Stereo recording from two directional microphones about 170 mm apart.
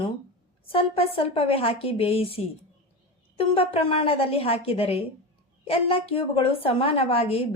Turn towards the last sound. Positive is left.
turn(degrees=35)  # may be behind; listen again after turning